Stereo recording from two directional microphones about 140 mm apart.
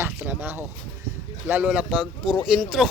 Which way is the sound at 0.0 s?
15° right (ahead or behind).